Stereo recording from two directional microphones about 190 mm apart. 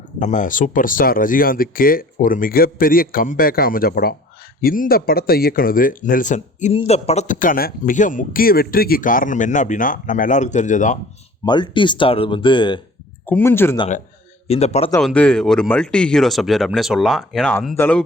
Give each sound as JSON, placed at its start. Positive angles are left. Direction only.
{"t": 0.2, "sound": "speech", "side_deg": 40}
{"t": 11.4, "sound": "speech", "side_deg": 25}
{"t": 13.2, "sound": "speech", "side_deg": 10}
{"t": 14.4, "sound": "a man's voice", "side_deg": 35}
{"t": 15.0, "sound": "speech", "side_deg": 5}